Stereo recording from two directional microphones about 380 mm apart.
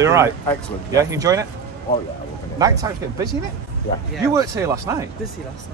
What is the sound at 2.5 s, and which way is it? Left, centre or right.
Speech, centre.